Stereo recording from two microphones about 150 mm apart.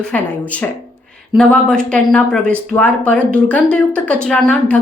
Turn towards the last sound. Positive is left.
turn(degrees=10)  # may be behind; listen again after turning